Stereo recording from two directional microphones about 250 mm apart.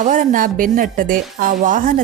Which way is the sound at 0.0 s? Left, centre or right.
Right.